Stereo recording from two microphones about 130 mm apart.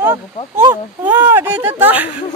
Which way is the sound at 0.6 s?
15° right (ahead or behind).